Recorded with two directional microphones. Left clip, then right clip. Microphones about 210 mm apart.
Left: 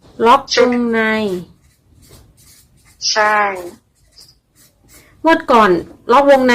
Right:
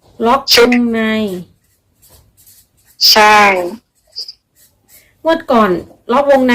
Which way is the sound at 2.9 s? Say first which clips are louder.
Right 7 dB; 40° right (ahead or behind).